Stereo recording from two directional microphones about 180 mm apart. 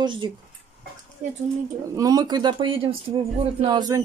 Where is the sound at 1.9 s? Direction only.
20° right (ahead or behind).